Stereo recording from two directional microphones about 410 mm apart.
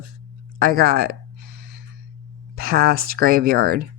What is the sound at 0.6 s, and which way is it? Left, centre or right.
Speech, right.